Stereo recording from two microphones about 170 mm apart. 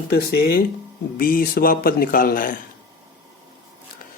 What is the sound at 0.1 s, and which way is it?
Speech, 75° left (ahead or behind).